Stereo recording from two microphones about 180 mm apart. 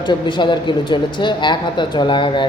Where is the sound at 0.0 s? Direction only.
25° left (ahead or behind).